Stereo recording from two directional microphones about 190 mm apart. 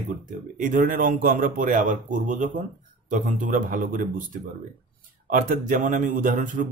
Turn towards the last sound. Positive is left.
turn(degrees=-45)  # may be behind; listen again after turning